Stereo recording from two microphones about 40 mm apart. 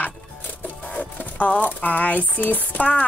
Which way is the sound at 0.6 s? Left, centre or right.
Left.